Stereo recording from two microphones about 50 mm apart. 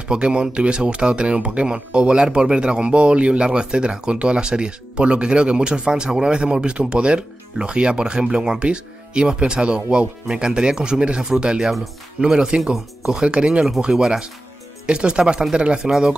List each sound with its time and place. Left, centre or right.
0.1 s speech: centre
12.7 s speech: centre
13.2 s speech: centre